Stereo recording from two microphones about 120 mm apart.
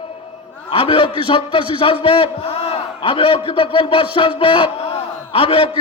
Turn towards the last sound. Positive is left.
turn(degrees=50)  # may be behind; listen again after turning